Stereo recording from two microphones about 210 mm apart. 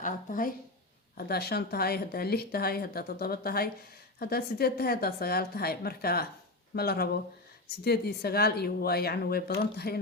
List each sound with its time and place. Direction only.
0.0 s a woman's voice: 40° left (ahead or behind)